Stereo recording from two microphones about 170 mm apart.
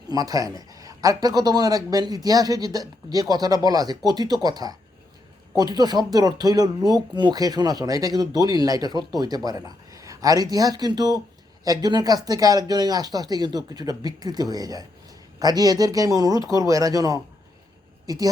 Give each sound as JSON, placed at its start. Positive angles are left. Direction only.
{"t": 0.1, "sound": "a woman's voice", "side_deg": -20}